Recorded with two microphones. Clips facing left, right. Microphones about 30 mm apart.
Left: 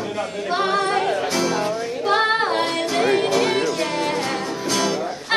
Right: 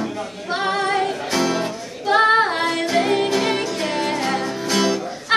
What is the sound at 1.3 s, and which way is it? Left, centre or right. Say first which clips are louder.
Music: right 1 dB; centre.